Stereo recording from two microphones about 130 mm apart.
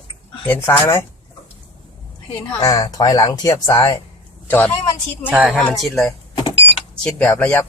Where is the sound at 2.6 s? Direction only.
30° left (ahead or behind).